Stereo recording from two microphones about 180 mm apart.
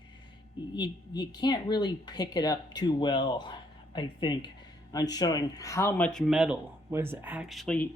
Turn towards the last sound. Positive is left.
turn(degrees=5)  # may be behind; listen again after turning